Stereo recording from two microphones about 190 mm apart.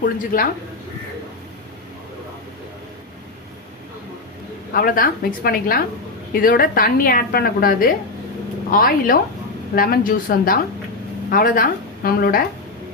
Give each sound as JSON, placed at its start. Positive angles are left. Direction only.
{"t": 0.3, "sound": "a woman's voice", "side_deg": 45}
{"t": 4.7, "sound": "a woman's voice", "side_deg": 50}